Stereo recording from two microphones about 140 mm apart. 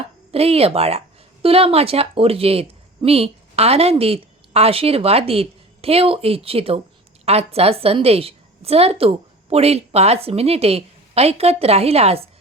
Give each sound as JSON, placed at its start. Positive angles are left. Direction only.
{"t": 0.3, "sound": "a woman's voice", "side_deg": -45}